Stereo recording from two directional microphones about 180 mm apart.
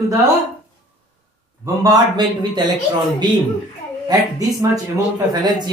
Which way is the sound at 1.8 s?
20° right (ahead or behind).